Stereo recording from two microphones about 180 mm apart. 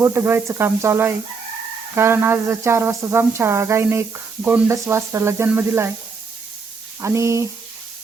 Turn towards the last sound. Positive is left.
turn(degrees=-15)  # may be behind; listen again after turning